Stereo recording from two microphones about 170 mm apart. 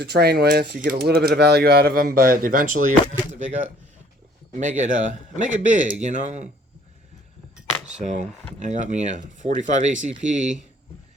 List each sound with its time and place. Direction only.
0.0 s speech: 70° right (ahead or behind); by 3.2 s 50° right (ahead or behind)
4.5 s speech: 45° right (ahead or behind)
7.9 s speech: 40° right (ahead or behind)